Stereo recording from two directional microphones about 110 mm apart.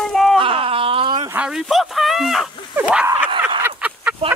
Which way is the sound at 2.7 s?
15° right (ahead or behind).